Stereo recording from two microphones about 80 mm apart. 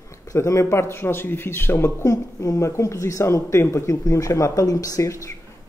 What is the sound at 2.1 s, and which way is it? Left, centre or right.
Speech, left.